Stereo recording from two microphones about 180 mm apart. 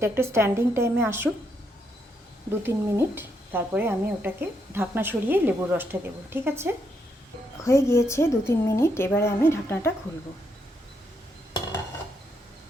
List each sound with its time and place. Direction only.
0.0 s speech: 15° right (ahead or behind)
2.5 s speech: 15° right (ahead or behind)
7.6 s a woman's voice: 15° left (ahead or behind)